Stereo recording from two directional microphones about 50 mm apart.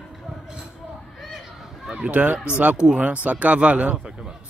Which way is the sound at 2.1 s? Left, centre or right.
Right.